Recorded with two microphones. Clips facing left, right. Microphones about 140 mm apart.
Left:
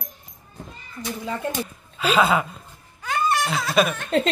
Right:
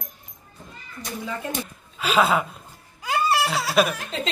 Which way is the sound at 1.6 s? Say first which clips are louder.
Left 4 dB; centre (ahead or behind).